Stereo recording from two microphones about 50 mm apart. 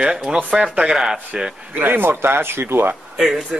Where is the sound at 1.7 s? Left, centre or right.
Right.